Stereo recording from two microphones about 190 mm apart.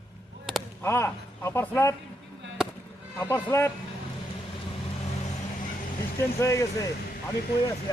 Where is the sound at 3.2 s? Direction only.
10° left (ahead or behind).